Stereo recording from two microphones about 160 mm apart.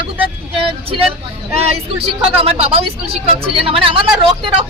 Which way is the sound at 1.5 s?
40° right (ahead or behind).